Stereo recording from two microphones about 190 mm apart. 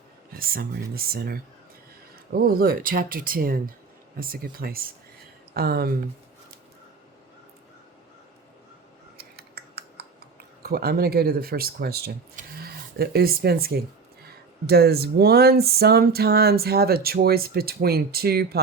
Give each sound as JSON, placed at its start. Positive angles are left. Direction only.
{"t": 0.3, "sound": "speech", "side_deg": -50}
{"t": 9.1, "sound": "scissors", "side_deg": -55}
{"t": 10.6, "sound": "speech", "side_deg": -55}